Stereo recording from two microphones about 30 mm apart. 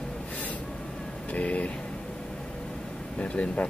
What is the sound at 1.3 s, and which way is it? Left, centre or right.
Speech, left.